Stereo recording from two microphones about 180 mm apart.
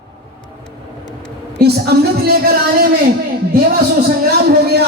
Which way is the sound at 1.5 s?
60° right (ahead or behind).